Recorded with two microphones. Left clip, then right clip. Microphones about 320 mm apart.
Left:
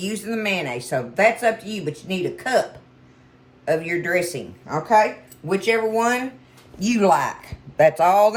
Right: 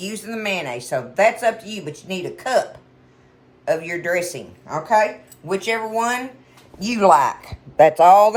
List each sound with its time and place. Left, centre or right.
0.0 s speech: centre
3.7 s speech: centre; by 8.4 s right